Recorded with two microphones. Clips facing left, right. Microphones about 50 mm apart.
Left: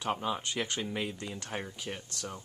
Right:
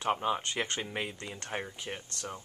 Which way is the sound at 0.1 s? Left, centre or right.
Right.